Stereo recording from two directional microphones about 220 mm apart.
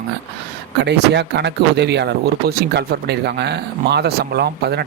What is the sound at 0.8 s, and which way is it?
Speech, 50° right (ahead or behind).